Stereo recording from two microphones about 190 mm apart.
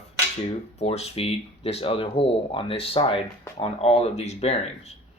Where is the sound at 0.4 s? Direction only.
30° left (ahead or behind).